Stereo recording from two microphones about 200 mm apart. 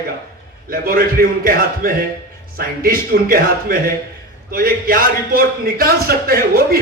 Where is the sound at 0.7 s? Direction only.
45° right (ahead or behind).